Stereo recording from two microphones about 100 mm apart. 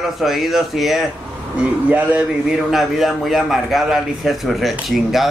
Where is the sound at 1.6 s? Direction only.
15° right (ahead or behind).